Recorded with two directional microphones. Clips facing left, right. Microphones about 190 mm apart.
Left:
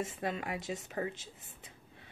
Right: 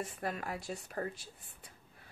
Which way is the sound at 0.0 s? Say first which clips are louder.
Left 2 dB; 25° left (ahead or behind).